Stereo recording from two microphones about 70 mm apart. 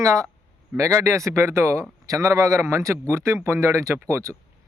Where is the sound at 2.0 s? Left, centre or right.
Right.